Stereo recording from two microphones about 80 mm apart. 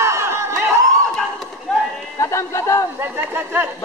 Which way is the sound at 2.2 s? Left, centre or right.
Left.